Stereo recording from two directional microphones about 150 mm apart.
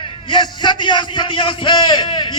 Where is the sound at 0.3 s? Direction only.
30° left (ahead or behind).